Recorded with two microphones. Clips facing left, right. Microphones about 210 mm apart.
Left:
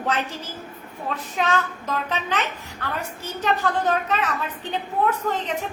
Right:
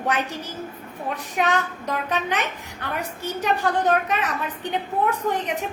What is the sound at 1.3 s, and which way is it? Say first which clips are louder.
A child's voice: right 1 dB; 15° right (ahead or behind).